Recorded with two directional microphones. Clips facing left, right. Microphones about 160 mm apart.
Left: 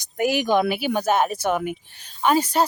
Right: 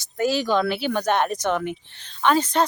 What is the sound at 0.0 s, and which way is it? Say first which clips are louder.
Speech: left 1 dB; 15° left (ahead or behind).